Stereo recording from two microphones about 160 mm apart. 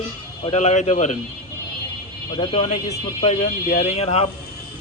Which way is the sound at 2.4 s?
40° left (ahead or behind).